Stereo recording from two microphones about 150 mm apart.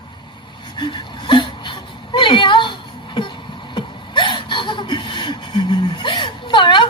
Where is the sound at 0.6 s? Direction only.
30° left (ahead or behind).